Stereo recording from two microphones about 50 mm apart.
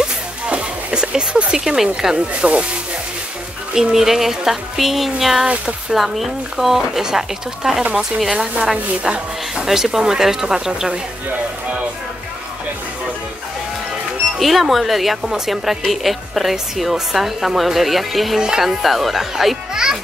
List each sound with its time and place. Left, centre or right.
0.0 s music: right
1.1 s speech: centre
3.7 s a woman's voice: centre
14.4 s a woman's voice: centre